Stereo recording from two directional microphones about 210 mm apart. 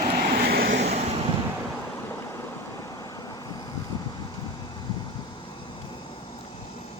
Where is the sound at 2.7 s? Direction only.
15° left (ahead or behind).